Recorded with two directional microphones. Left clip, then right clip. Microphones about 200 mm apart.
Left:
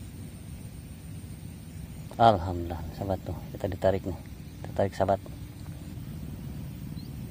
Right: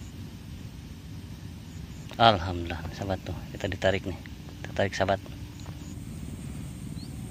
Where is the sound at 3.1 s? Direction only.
20° left (ahead or behind).